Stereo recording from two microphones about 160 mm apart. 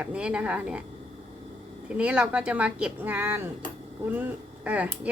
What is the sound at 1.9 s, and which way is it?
A woman's voice, 5° right (ahead or behind).